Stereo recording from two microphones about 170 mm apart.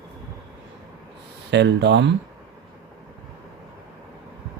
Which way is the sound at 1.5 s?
90° right.